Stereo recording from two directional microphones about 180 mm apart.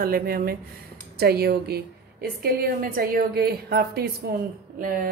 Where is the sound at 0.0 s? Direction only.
55° right (ahead or behind).